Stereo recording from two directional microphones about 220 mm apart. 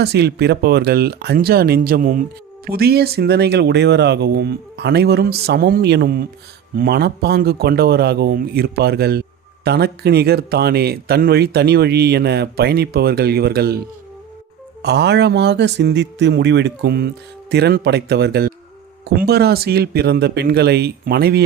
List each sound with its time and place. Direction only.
0.0 s speech: 50° right (ahead or behind)